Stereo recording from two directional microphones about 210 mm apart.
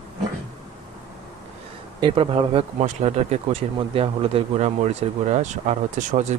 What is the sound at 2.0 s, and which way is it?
Speech, 25° right (ahead or behind).